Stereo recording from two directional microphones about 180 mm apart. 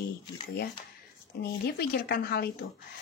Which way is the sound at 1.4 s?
60° left (ahead or behind).